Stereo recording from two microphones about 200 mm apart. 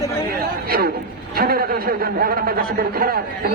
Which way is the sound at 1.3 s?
50° right (ahead or behind).